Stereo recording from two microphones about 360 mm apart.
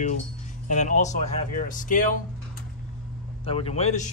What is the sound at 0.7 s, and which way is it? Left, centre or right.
Speech, centre.